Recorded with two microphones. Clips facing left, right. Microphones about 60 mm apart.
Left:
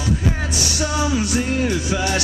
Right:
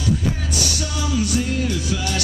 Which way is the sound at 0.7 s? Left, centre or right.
Left.